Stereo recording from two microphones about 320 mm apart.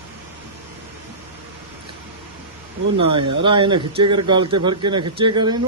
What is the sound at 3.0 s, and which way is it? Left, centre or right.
Speech, centre.